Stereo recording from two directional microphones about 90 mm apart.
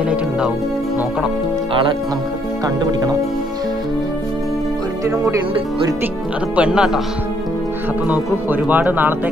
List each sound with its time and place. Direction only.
2.6 s speech: 40° right (ahead or behind)
5.0 s speech: 35° right (ahead or behind)
6.5 s speech: 10° right (ahead or behind)
8.1 s speech: 20° right (ahead or behind)